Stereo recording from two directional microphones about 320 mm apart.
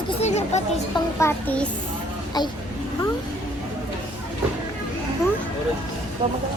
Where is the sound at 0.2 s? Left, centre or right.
Left.